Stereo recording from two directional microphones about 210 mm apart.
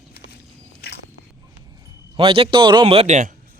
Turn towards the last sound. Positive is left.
turn(degrees=-35)  # may be behind; listen again after turning